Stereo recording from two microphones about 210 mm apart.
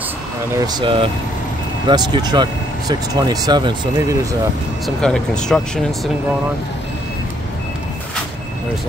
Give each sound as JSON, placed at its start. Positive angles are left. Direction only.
{"t": 0.6, "sound": "speech", "side_deg": -20}
{"t": 4.8, "sound": "speech", "side_deg": 5}